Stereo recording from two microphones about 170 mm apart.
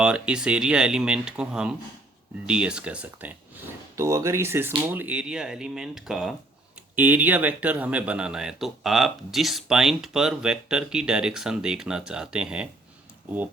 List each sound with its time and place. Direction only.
0.0 s speech: 5° right (ahead or behind)